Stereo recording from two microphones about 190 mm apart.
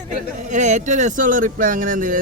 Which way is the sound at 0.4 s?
40° right (ahead or behind).